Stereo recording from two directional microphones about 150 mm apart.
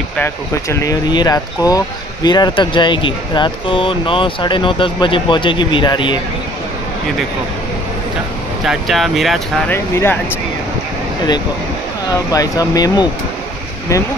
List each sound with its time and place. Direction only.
0.2 s speech: 20° left (ahead or behind)
8.6 s speech: centre (ahead or behind)
9.7 s speech: 15° left (ahead or behind)
12.1 s speech: 25° left (ahead or behind)